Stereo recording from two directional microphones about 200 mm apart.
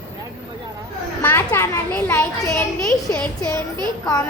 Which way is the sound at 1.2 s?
10° left (ahead or behind).